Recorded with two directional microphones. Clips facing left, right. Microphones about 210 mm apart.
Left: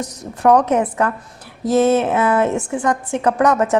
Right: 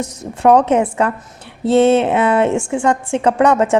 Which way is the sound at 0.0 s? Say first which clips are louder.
Right 2 dB; 25° right (ahead or behind).